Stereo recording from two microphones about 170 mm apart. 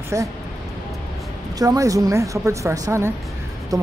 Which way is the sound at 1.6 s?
20° right (ahead or behind).